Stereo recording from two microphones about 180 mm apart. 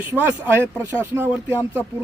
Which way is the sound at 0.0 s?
10° right (ahead or behind).